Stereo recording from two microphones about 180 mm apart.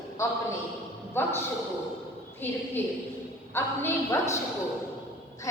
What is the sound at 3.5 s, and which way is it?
Speech, 10° left (ahead or behind).